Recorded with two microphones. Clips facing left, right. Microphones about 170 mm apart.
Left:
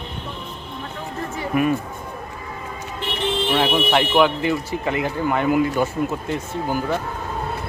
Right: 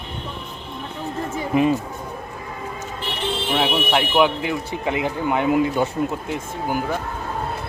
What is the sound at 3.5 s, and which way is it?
Speech, 5° right (ahead or behind).